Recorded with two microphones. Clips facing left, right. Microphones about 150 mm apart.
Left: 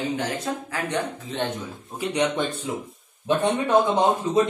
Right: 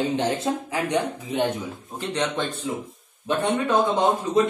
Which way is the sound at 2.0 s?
10° left (ahead or behind).